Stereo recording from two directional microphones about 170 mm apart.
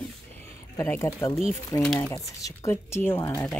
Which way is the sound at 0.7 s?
15° left (ahead or behind).